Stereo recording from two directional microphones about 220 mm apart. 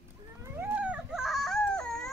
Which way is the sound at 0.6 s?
5° right (ahead or behind).